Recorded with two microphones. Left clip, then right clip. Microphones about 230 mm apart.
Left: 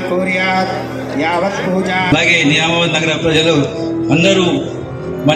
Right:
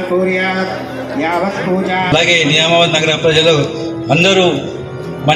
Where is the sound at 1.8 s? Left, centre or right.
Left.